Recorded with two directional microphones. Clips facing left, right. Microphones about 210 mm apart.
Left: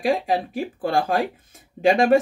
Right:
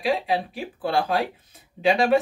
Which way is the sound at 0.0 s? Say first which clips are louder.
Left 2 dB; 45° left (ahead or behind).